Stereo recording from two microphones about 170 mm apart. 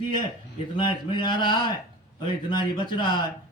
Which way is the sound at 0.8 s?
25° left (ahead or behind).